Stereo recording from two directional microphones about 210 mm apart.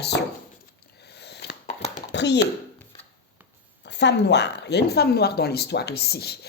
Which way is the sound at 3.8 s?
55° left (ahead or behind).